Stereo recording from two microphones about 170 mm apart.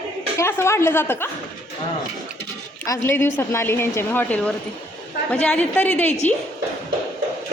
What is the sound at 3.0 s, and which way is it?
Speech, 15° left (ahead or behind).